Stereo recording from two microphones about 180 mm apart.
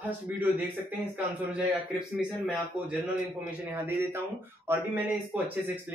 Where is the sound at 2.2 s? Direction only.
5° right (ahead or behind).